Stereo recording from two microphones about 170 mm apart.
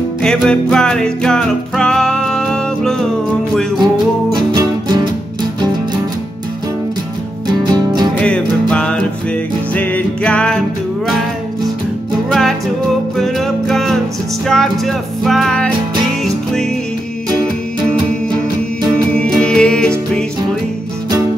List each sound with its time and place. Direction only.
0.2 s music: 5° left (ahead or behind)
3.8 s music: 25° right (ahead or behind)
7.6 s music: 25° right (ahead or behind)
8.2 s music: 5° left (ahead or behind)
12.3 s music: centre (ahead or behind)
19.1 s music: 5° left (ahead or behind)